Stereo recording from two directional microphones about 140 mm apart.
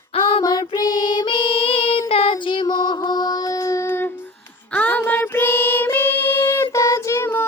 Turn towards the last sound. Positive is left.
turn(degrees=15)  # may be behind; listen again after turning